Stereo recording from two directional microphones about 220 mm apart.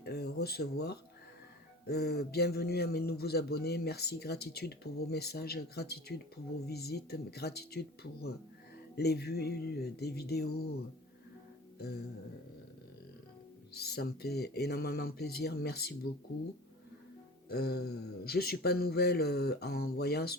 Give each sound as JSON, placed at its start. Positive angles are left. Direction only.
{"t": 0.0, "sound": "a man's voice", "side_deg": 45}
{"t": 9.0, "sound": "a man's voice", "side_deg": 45}
{"t": 13.7, "sound": "a man's voice", "side_deg": 45}
{"t": 17.5, "sound": "a man's voice", "side_deg": 45}